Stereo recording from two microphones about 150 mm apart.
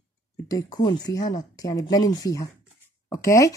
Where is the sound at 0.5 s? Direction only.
25° left (ahead or behind).